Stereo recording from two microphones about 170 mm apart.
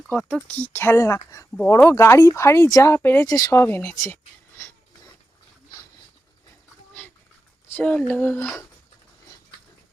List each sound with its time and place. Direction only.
0.1 s speech: 5° left (ahead or behind)
7.7 s speech: 10° left (ahead or behind)